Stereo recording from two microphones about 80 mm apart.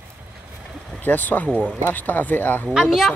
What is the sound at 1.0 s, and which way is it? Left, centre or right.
Speech, left.